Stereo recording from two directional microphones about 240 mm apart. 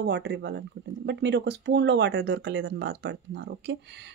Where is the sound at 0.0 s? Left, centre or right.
Right.